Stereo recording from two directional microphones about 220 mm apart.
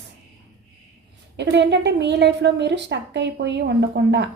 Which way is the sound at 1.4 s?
50° right (ahead or behind).